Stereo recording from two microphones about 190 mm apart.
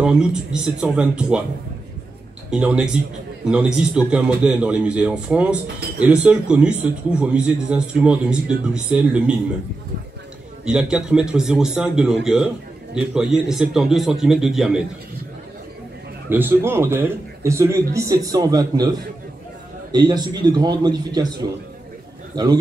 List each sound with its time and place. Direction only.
0.0 s a man's voice: 5° right (ahead or behind)
2.5 s a man's voice: 5° right (ahead or behind)
10.6 s a man's voice: 5° right (ahead or behind)
16.3 s a man's voice: 10° right (ahead or behind)